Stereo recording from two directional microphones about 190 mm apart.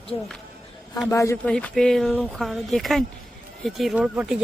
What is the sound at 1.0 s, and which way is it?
Speech, 15° left (ahead or behind).